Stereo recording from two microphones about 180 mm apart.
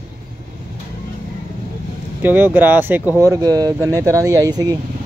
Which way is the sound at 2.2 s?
10° right (ahead or behind).